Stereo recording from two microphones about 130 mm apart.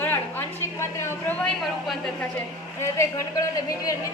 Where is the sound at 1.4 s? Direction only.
5° left (ahead or behind).